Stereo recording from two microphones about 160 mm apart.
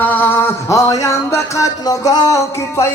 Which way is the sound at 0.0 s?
10° left (ahead or behind).